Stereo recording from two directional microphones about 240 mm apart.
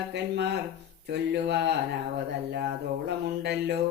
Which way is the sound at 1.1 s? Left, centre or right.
Right.